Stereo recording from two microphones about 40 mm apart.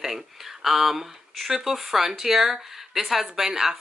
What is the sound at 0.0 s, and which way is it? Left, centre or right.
Speech, centre.